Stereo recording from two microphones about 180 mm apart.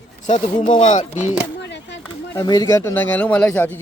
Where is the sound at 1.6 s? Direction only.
75° left (ahead or behind).